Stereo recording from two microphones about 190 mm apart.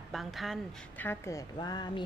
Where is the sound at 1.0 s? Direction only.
15° left (ahead or behind).